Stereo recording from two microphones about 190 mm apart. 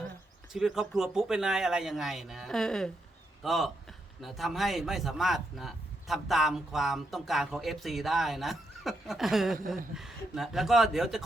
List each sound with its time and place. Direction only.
0.5 s speech: centre (ahead or behind)